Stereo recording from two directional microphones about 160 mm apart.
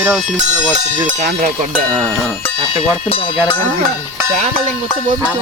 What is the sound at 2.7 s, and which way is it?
Speech, 35° left (ahead or behind).